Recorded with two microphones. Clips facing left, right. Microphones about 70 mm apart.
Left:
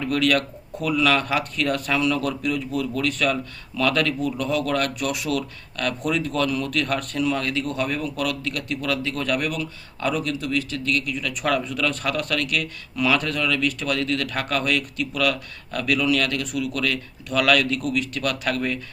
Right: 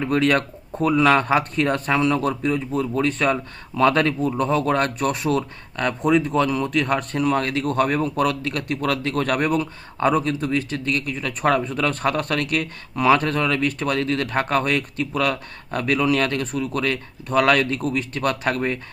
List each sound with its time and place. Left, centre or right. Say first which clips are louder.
0.0 s speech: right 2 dB; right